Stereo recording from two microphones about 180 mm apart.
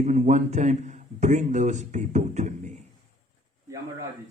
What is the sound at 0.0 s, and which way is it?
A man's voice, 40° right (ahead or behind).